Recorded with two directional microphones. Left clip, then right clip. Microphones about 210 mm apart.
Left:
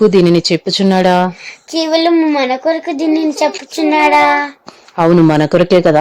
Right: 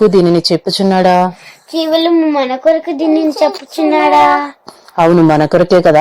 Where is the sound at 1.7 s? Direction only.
35° left (ahead or behind).